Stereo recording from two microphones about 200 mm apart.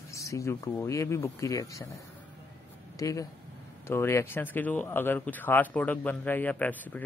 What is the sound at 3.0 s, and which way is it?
A man's voice, 15° left (ahead or behind).